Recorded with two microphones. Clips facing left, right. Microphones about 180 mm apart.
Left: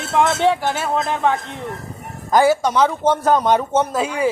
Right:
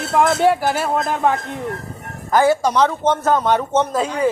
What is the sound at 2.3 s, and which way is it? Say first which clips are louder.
Speech: even; 15° left (ahead or behind).